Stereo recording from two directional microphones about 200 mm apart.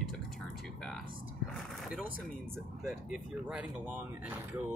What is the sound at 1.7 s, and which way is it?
Music, centre (ahead or behind).